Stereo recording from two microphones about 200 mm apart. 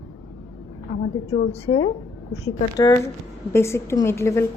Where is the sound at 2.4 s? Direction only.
20° left (ahead or behind).